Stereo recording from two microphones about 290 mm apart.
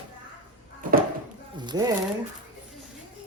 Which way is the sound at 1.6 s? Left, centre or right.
Centre.